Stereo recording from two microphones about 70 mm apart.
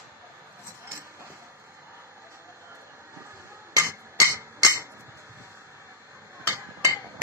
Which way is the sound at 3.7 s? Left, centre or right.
Right.